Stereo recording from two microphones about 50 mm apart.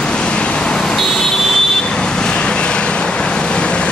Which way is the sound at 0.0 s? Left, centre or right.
Centre.